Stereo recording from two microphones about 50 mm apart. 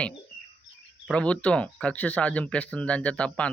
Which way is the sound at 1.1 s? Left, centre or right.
Centre.